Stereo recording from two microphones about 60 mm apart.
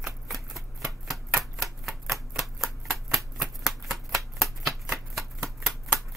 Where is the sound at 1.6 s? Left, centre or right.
Centre.